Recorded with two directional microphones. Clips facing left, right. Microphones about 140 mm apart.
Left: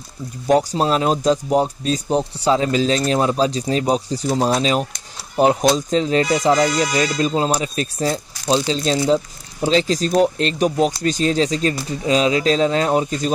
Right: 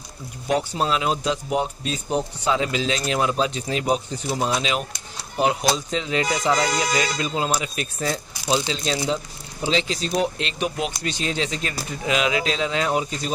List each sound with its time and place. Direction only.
0.5 s speech: 40° left (ahead or behind)